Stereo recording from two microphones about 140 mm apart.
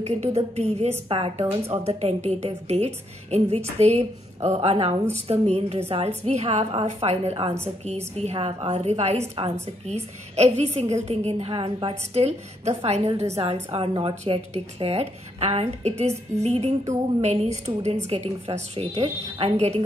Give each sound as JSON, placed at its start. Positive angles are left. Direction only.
{"t": 0.0, "sound": "a woman's voice", "side_deg": -50}
{"t": 1.0, "sound": "a woman's voice", "side_deg": -40}